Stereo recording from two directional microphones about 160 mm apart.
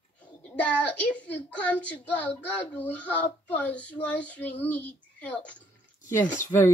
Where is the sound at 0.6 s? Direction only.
10° left (ahead or behind).